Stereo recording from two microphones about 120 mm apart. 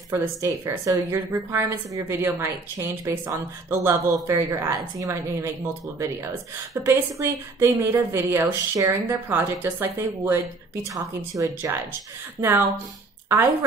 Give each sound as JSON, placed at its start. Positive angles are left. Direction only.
{"t": 0.1, "sound": "a woman's voice", "side_deg": -25}
{"t": 6.7, "sound": "a woman's voice", "side_deg": -25}